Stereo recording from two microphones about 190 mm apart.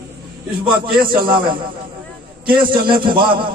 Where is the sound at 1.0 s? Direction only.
50° right (ahead or behind).